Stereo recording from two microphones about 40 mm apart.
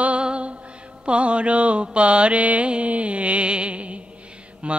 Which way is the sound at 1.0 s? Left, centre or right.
Right.